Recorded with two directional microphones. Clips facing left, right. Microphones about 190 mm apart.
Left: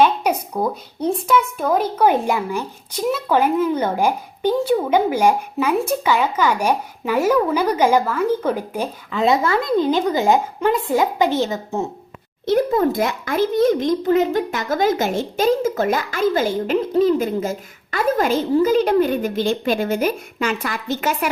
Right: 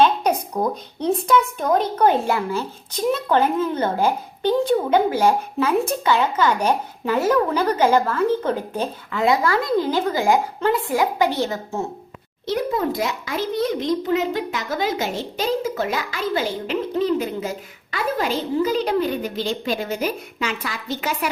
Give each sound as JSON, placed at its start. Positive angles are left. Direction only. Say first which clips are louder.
{"t": 0.0, "sound": "speech", "louder": "left 1 dB", "side_deg": 10}
{"t": 9.2, "sound": "a woman's voice", "louder": "left 1 dB", "side_deg": 25}
{"t": 12.5, "sound": "a child's voice", "louder": "left 5 dB", "side_deg": 50}